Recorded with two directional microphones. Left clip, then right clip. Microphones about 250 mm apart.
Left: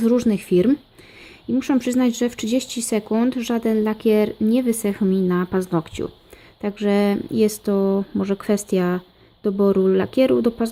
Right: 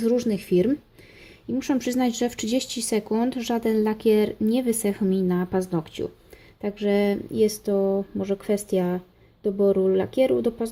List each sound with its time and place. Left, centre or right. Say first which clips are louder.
0.0 s speech: left 4 dB; centre